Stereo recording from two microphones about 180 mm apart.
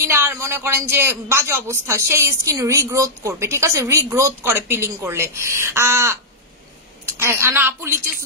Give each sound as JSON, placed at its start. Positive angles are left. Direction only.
{"t": 0.0, "sound": "a woman's voice", "side_deg": -15}